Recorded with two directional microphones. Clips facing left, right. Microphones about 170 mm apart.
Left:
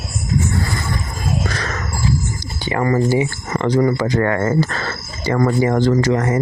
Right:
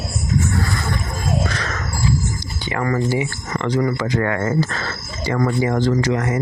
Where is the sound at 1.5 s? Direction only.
40° left (ahead or behind).